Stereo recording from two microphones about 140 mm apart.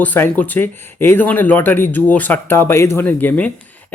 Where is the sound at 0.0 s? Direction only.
10° left (ahead or behind).